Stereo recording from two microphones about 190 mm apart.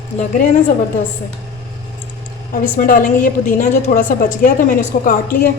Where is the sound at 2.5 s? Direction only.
45° left (ahead or behind).